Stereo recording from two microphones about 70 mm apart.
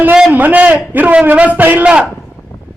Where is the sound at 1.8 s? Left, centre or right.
Centre.